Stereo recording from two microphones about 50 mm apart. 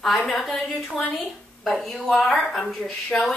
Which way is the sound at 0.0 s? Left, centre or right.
Centre.